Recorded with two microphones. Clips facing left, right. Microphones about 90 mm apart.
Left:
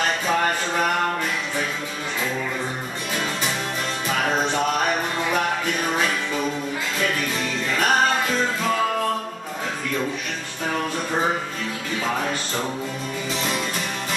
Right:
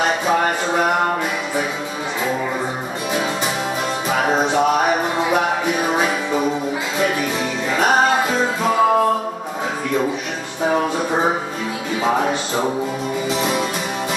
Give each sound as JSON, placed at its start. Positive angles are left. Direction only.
{"t": 0.0, "sound": "a sound", "side_deg": -10}
{"t": 4.1, "sound": "music", "side_deg": -15}
{"t": 7.7, "sound": "music", "side_deg": -10}
{"t": 10.6, "sound": "music", "side_deg": -15}
{"t": 12.0, "sound": "speech", "side_deg": -20}
{"t": 13.3, "sound": "music", "side_deg": -5}